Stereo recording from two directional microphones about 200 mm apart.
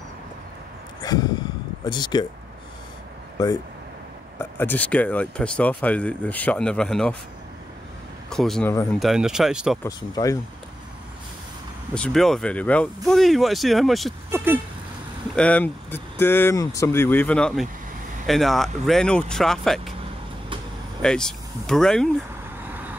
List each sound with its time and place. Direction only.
1.0 s speech: 20° left (ahead or behind)
4.4 s speech: 10° left (ahead or behind)
8.3 s speech: centre (ahead or behind)
9.8 s speech: 15° left (ahead or behind)
11.9 s speech: 5° left (ahead or behind)
14.3 s speech: 10° right (ahead or behind)
15.3 s speech: 5° left (ahead or behind)
21.0 s speech: 5° left (ahead or behind)